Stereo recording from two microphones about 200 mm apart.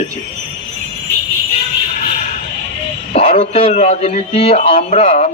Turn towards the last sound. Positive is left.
turn(degrees=35)  # may be behind; listen again after turning